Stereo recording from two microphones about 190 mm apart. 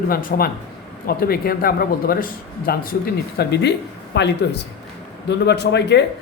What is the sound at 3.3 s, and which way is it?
Speech, 60° left (ahead or behind).